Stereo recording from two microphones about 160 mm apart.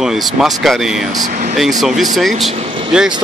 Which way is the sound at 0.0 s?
5° right (ahead or behind).